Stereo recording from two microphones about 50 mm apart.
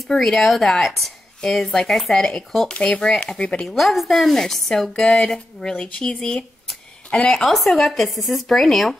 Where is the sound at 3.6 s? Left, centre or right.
Centre.